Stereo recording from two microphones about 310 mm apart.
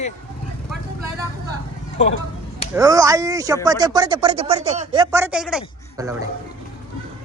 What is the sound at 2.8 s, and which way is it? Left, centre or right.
Speech, centre.